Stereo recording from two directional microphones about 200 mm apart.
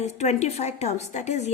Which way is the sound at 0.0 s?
35° left (ahead or behind).